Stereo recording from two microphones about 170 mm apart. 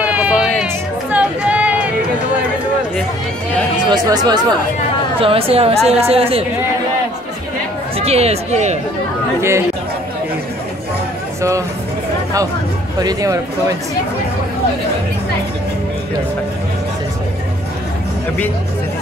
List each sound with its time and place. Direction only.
0.0 s a sound: 10° right (ahead or behind)
1.1 s music: 10° right (ahead or behind)
3.9 s speech: 25° right (ahead or behind)
5.2 s speech: 35° right (ahead or behind)
8.0 s speech: 40° right (ahead or behind)
13.0 s speech: 20° right (ahead or behind)